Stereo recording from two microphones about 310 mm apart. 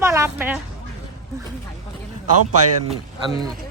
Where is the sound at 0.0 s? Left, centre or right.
Centre.